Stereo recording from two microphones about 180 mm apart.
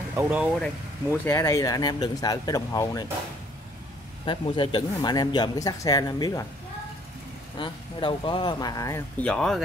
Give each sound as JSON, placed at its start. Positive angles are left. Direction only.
{"t": 0.1, "sound": "speech", "side_deg": -10}
{"t": 1.2, "sound": "speech", "side_deg": 15}
{"t": 4.3, "sound": "speech", "side_deg": 25}
{"t": 7.5, "sound": "speech", "side_deg": 25}
{"t": 9.2, "sound": "speech", "side_deg": 5}